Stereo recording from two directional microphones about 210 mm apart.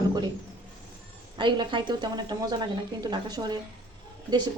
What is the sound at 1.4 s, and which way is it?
A woman's voice, 20° right (ahead or behind).